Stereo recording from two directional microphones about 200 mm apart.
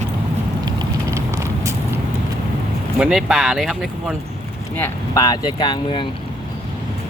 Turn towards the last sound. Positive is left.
turn(degrees=25)  # may be behind; listen again after turning